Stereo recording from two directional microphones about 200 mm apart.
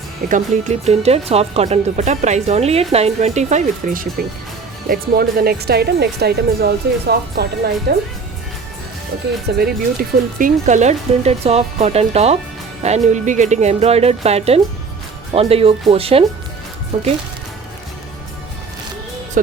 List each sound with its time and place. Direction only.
0.3 s speech: 40° right (ahead or behind)
9.6 s speech: 45° right (ahead or behind); by 16.2 s 30° right (ahead or behind)